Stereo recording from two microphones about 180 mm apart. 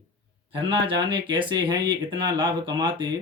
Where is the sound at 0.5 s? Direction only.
30° right (ahead or behind).